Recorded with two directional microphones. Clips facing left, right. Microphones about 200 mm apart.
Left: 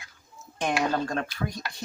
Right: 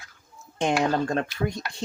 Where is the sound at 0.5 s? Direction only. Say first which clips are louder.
Right 3 dB; 25° right (ahead or behind).